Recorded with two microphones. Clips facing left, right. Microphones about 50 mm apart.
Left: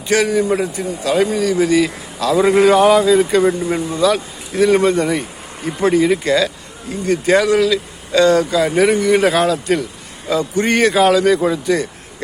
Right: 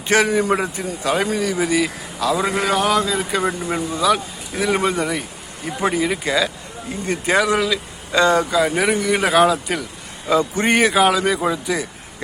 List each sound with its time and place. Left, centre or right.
0.1 s a man's voice: right; by 6.5 s centre
7.0 s a man's voice: right
7.3 s speech: centre
8.1 s a man's voice: right
8.4 s speech: centre
10.2 s a man's voice: right
10.8 s speech: centre